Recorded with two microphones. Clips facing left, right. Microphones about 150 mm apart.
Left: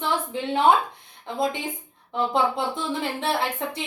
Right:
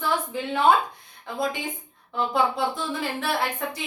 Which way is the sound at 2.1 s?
25° left (ahead or behind).